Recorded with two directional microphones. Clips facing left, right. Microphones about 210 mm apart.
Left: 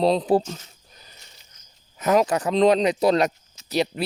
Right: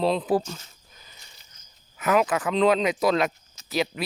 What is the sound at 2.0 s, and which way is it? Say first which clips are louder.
Speech: left 3 dB; 40° left (ahead or behind).